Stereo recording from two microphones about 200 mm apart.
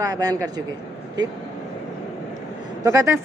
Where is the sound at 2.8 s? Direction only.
15° right (ahead or behind).